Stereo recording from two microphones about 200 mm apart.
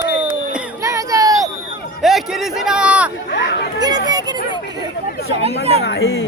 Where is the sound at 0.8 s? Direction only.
15° right (ahead or behind).